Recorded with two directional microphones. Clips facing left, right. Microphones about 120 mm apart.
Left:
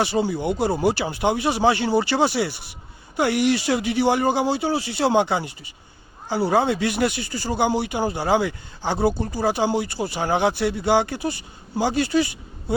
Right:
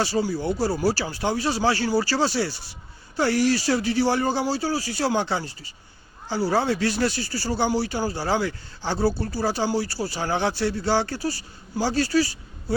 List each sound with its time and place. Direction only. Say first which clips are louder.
0.0 s speech: left 2 dB; 20° left (ahead or behind)